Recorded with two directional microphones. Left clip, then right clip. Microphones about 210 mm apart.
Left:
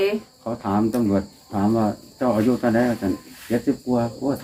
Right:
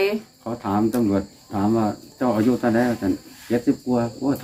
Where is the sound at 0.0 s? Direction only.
10° right (ahead or behind).